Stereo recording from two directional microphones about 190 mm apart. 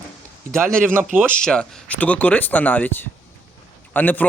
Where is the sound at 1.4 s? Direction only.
5° left (ahead or behind).